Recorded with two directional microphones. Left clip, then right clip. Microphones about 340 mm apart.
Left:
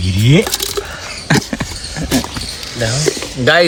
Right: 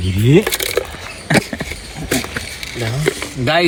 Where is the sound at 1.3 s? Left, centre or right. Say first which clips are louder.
Even; centre.